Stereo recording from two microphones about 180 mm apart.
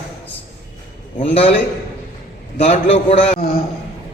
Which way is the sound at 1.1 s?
30° left (ahead or behind).